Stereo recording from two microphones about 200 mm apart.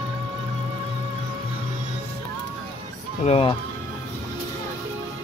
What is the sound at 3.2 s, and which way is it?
Speech, 30° left (ahead or behind).